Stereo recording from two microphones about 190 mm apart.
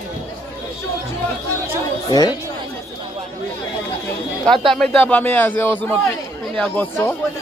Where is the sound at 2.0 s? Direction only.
20° left (ahead or behind).